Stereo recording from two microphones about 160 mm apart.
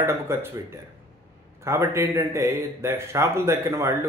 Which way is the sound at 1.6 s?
15° right (ahead or behind).